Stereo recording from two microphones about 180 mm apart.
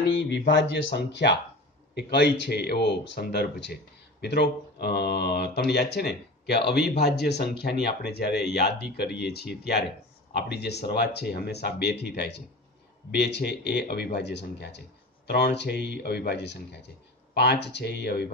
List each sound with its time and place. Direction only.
0.1 s speech: 85° left; by 18.3 s 65° left (ahead or behind)